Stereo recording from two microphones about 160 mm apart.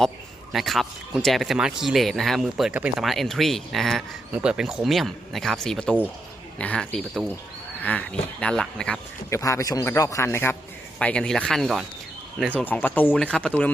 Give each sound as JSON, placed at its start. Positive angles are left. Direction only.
{"t": 0.5, "sound": "a man's voice", "side_deg": 0}
{"t": 9.3, "sound": "a man's voice", "side_deg": 20}